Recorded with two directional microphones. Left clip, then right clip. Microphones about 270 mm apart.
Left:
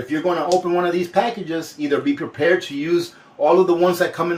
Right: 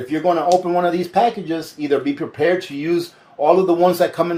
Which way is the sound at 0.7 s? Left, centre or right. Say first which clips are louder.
Right 1 dB; right.